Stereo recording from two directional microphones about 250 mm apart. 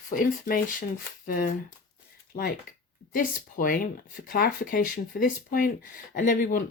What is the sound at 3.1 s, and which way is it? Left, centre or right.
Speech, left.